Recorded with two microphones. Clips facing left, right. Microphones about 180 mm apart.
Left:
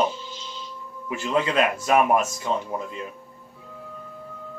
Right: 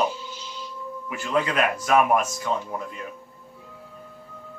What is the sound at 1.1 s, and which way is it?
A man's voice, 25° left (ahead or behind).